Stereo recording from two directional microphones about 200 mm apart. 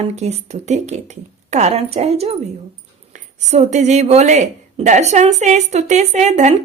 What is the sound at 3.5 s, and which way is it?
A woman's voice, 35° right (ahead or behind).